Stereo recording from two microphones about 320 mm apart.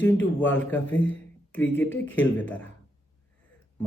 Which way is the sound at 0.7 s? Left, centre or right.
Centre.